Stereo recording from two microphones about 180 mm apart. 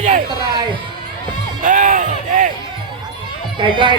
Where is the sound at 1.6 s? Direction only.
45° right (ahead or behind).